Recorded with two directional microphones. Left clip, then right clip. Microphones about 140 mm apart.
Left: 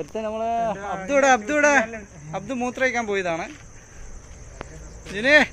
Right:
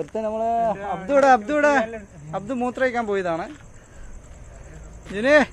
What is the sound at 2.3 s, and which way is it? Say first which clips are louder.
Speech: right 2 dB; 45° right (ahead or behind).